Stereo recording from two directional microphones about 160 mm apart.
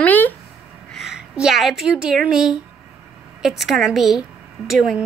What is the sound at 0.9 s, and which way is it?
A woman's voice, centre (ahead or behind).